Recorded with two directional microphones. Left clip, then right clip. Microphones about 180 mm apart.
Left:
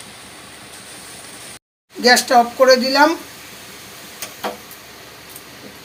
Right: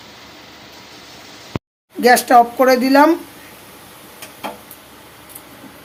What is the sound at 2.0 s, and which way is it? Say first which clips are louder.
Speech: right 2 dB; 45° right (ahead or behind).